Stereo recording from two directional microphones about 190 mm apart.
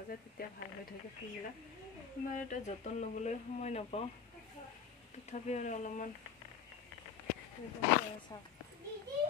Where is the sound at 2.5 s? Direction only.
40° left (ahead or behind).